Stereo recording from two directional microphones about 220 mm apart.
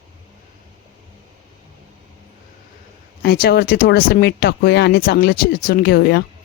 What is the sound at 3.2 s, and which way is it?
Speech, 45° left (ahead or behind).